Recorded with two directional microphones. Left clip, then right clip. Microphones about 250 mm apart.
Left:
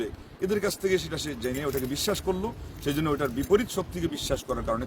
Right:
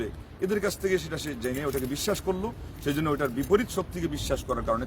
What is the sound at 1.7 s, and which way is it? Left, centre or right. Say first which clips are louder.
Speech: left 1 dB; centre.